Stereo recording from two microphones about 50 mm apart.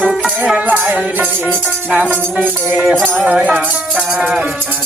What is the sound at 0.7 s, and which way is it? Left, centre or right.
Music, right.